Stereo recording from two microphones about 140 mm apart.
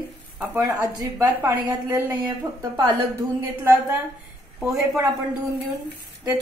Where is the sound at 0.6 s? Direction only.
20° right (ahead or behind).